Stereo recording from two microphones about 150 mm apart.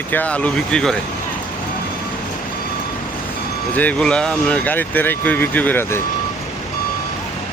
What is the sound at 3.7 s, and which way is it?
Speech, 10° left (ahead or behind).